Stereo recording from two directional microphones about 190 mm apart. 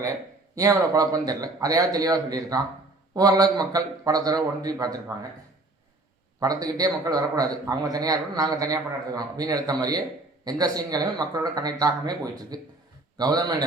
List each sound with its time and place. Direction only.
0.0 s a man's voice: 15° right (ahead or behind)
6.4 s a man's voice: 20° right (ahead or behind)